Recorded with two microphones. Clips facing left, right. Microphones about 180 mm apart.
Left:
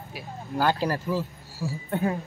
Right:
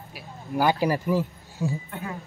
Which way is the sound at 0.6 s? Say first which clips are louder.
Right 2 dB; 15° right (ahead or behind).